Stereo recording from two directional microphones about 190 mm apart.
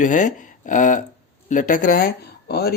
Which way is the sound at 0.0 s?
40° left (ahead or behind).